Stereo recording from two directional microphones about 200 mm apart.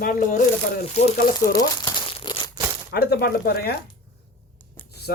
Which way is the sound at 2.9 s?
50° left (ahead or behind).